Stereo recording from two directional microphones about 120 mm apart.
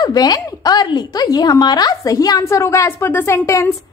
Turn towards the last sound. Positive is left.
turn(degrees=20)  # may be behind; listen again after turning